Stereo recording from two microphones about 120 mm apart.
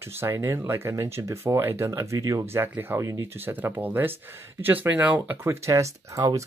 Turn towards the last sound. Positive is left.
turn(degrees=-25)  # may be behind; listen again after turning